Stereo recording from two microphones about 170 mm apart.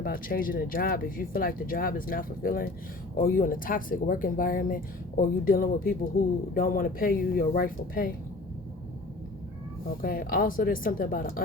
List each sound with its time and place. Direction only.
0.0 s speech: 55° left (ahead or behind)
10.0 s speech: 60° left (ahead or behind)